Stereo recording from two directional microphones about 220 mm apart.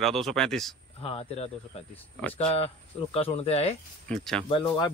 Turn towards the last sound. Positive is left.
turn(degrees=20)  # may be behind; listen again after turning